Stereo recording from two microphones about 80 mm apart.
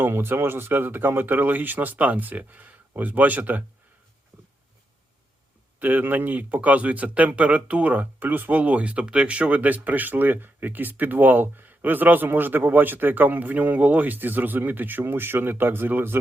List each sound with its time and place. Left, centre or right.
0.0 s speech: right
5.8 s speech: right